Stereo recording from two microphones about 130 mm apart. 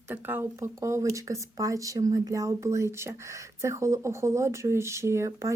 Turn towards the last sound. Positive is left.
turn(degrees=-20)  # may be behind; listen again after turning